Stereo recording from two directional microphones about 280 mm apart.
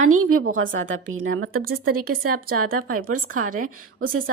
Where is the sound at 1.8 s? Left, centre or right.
Right.